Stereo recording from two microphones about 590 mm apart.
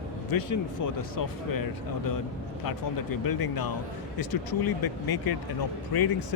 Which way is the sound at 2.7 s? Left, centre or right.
Left.